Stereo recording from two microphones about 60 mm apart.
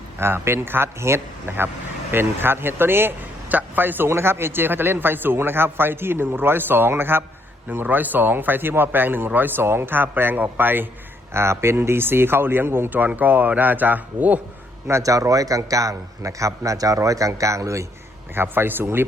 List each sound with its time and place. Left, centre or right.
0.2 s a man's voice: right
11.3 s a man's voice: right
14.8 s a man's voice: right
18.3 s a man's voice: right